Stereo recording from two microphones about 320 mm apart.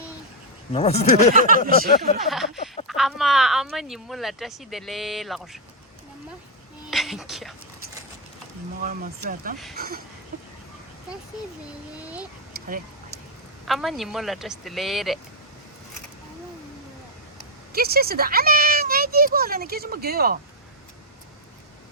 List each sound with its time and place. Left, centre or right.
0.7 s speech: centre
1.3 s a child's voice: right
2.2 s speech: centre
6.9 s speech: centre
8.8 s a child's voice: right
12.5 s a sound: right
13.7 s speech: centre
17.7 s a child's voice: right